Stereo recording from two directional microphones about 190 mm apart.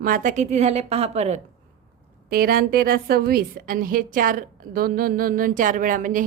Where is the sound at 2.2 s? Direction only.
50° right (ahead or behind).